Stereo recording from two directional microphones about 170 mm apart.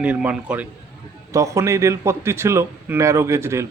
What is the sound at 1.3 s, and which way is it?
A man's voice, 20° right (ahead or behind).